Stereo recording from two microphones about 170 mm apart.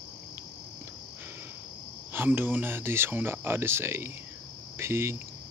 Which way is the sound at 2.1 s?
10° right (ahead or behind).